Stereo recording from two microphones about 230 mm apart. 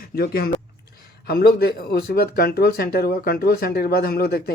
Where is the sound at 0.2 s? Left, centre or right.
Left.